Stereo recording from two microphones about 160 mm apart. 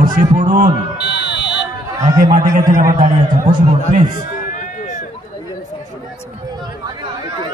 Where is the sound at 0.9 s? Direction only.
90° left.